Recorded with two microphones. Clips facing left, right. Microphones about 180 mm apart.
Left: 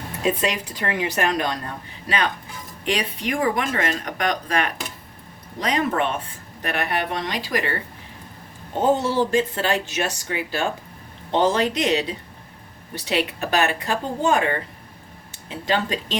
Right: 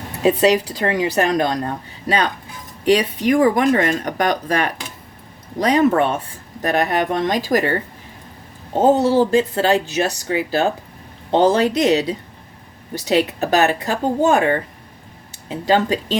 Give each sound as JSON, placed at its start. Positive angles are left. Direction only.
{"t": 0.2, "sound": "speech", "side_deg": -35}